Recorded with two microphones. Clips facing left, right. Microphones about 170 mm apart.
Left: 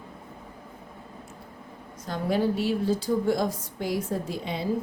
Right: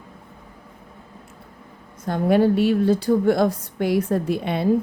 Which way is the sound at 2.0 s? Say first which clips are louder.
Right 8 dB; 55° right (ahead or behind).